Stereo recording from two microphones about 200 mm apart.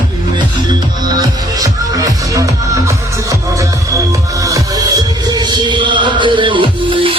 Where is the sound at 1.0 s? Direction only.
20° right (ahead or behind).